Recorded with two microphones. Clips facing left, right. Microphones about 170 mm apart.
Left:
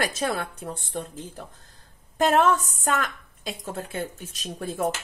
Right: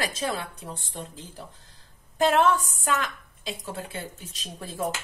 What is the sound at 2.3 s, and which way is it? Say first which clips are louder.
A woman's voice: left 1 dB; 45° left (ahead or behind).